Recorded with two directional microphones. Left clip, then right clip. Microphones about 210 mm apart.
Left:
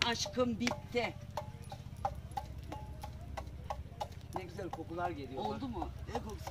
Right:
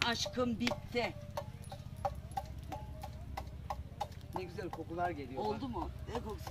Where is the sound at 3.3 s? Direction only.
5° right (ahead or behind).